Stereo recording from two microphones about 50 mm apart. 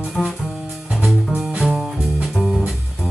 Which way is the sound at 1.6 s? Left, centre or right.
Centre.